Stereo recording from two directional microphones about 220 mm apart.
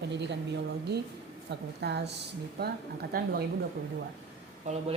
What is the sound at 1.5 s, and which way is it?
Speech, 50° right (ahead or behind).